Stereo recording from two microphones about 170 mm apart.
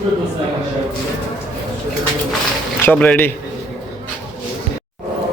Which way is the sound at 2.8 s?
10° left (ahead or behind).